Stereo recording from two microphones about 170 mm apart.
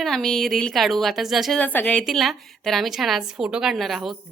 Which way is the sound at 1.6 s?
10° left (ahead or behind).